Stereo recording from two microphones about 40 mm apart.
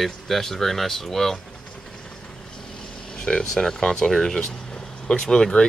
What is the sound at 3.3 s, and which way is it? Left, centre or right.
Speech, centre.